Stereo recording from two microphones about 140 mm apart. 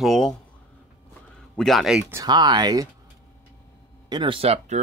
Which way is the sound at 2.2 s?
30° right (ahead or behind).